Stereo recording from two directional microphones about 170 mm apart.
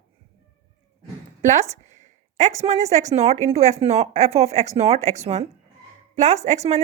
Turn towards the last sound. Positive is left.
turn(degrees=-40)  # may be behind; listen again after turning